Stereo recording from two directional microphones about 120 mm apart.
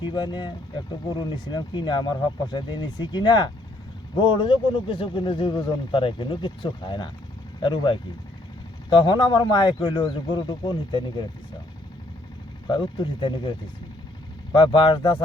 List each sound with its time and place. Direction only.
0.0 s speech: 40° left (ahead or behind)
12.6 s speech: 40° left (ahead or behind)